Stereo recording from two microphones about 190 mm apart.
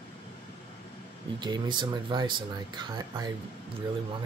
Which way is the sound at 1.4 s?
25° right (ahead or behind).